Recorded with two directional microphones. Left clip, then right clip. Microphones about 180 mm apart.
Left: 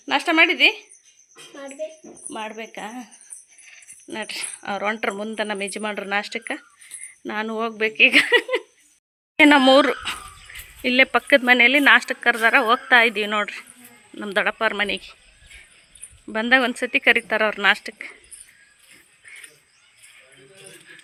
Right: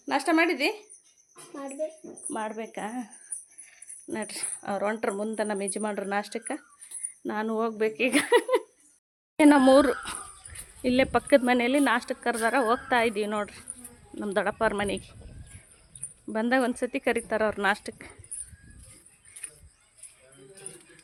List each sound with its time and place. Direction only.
0.0 s a woman's voice: centre (ahead or behind)
2.6 s speech: 15° right (ahead or behind)
9.4 s speech: 5° right (ahead or behind)
16.3 s speech: 10° right (ahead or behind)